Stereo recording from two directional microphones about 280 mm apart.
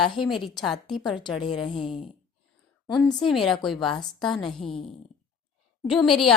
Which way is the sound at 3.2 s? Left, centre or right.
Centre.